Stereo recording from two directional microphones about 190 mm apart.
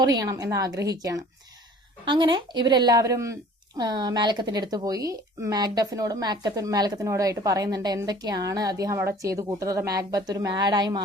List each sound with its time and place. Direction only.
0.0 s speech: 20° right (ahead or behind)